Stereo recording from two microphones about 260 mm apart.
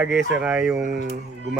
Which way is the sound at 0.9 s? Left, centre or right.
Right.